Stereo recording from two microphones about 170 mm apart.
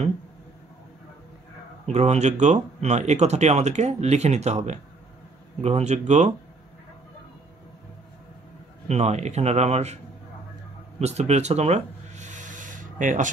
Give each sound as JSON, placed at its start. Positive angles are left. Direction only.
{"t": 1.9, "sound": "speech", "side_deg": -40}
{"t": 8.8, "sound": "speech", "side_deg": -40}
{"t": 11.0, "sound": "a sound", "side_deg": -40}